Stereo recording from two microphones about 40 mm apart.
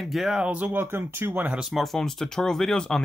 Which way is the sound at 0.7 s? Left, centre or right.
Right.